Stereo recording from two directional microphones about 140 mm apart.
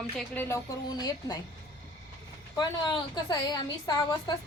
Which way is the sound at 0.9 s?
30° left (ahead or behind).